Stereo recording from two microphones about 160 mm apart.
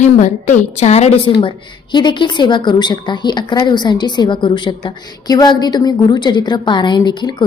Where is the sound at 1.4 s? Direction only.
30° left (ahead or behind).